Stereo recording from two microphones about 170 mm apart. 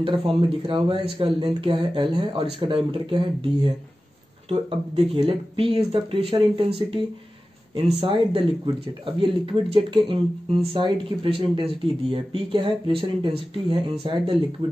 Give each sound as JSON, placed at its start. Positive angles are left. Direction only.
{"t": 0.0, "sound": "speech", "side_deg": -30}